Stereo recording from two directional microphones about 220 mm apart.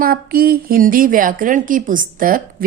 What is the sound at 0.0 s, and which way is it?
A woman's voice, 40° right (ahead or behind).